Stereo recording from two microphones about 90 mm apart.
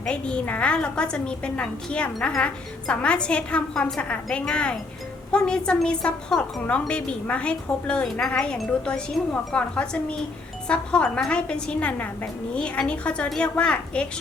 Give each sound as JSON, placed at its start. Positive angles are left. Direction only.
{"t": 0.0, "sound": "speech", "side_deg": 10}